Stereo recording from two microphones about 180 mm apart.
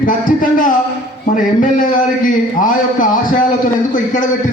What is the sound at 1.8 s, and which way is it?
A man's voice, 50° left (ahead or behind).